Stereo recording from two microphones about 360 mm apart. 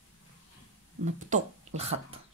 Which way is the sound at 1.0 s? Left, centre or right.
Centre.